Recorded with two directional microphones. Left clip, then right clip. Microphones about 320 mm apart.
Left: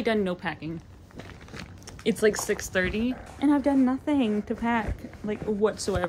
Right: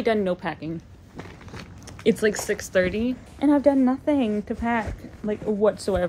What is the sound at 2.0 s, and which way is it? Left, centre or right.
A woman's voice, centre.